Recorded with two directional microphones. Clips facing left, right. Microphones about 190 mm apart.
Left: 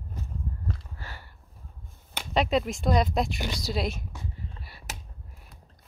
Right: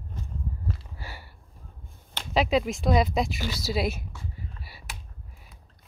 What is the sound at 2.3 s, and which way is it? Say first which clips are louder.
Speech: right 1 dB; centre (ahead or behind).